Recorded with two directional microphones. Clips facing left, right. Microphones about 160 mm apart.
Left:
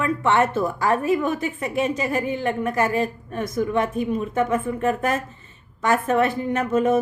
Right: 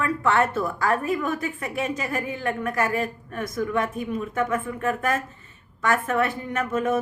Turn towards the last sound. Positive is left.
turn(degrees=20)  # may be behind; listen again after turning